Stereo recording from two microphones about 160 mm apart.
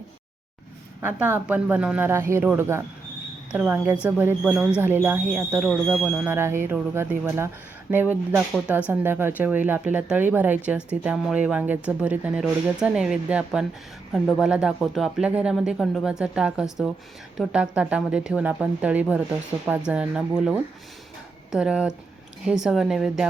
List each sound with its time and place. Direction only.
1.0 s speech: 10° right (ahead or behind)
6.3 s speech: 15° right (ahead or behind)